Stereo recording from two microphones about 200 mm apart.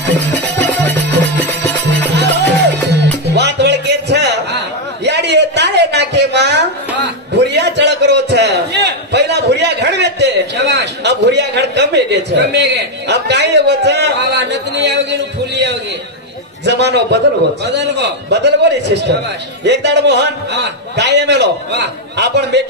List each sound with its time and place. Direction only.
0.0 s music: 10° left (ahead or behind)
3.3 s a sound: 60° right (ahead or behind)
16.6 s a man's voice: 60° right (ahead or behind)